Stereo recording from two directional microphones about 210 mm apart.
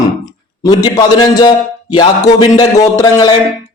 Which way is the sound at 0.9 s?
20° left (ahead or behind).